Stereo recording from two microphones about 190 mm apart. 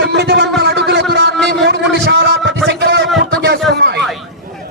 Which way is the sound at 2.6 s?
65° right (ahead or behind).